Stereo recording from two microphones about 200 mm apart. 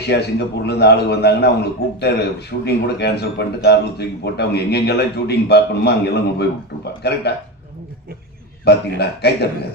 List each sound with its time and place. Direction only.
0.1 s a man's voice: 55° left (ahead or behind)
8.6 s a man's voice: 55° left (ahead or behind)